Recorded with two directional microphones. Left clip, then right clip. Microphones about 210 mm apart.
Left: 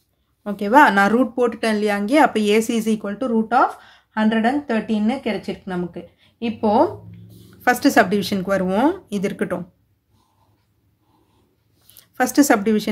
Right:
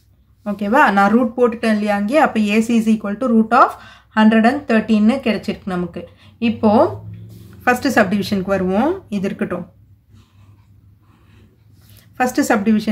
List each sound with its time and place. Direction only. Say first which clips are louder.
0.4 s speech: left 1 dB; 25° left (ahead or behind)
3.2 s speech: right 5 dB; centre (ahead or behind)
7.6 s speech: right 1 dB; 20° left (ahead or behind)
12.0 s speech: even; 25° left (ahead or behind)